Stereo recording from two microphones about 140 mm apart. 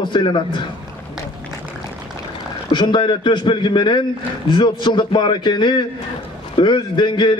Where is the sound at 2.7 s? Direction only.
35° left (ahead or behind).